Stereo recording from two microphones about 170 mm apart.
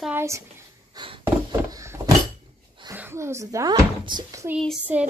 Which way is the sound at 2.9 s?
15° right (ahead or behind).